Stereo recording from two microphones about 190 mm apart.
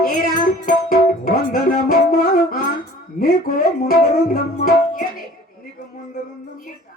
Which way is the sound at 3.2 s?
45° left (ahead or behind).